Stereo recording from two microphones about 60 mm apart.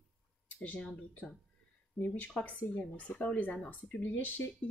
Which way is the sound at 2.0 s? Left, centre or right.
Left.